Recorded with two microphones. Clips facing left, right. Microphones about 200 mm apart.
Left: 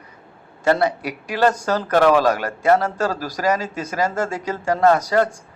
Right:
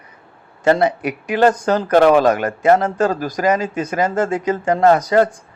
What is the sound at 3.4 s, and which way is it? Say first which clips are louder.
Speech: right 3 dB; 20° right (ahead or behind).